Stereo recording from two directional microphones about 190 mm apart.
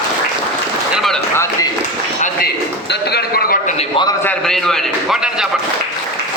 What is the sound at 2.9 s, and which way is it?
Speech, 60° left (ahead or behind).